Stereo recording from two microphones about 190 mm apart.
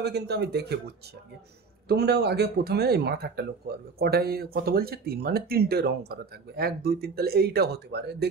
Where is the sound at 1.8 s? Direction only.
60° right (ahead or behind).